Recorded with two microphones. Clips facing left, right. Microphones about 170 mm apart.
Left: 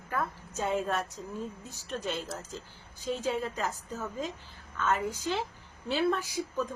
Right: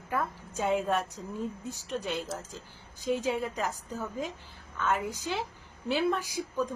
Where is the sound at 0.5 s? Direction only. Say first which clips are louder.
Right 2 dB; 15° right (ahead or behind).